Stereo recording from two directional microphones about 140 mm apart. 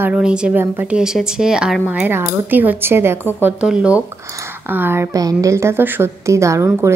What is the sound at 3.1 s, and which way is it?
Speech, 15° left (ahead or behind).